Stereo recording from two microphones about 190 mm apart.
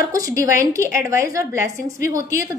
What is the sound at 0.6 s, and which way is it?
A woman's voice, 15° right (ahead or behind).